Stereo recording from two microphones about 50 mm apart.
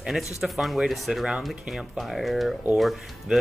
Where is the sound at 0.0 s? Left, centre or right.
Centre.